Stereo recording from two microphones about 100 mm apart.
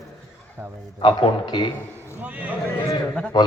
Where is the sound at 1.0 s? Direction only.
55° left (ahead or behind).